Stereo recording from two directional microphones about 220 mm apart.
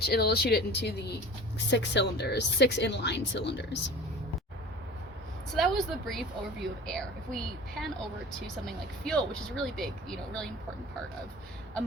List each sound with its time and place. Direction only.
0.0 s speech: 45° left (ahead or behind)
5.5 s a woman's voice: centre (ahead or behind)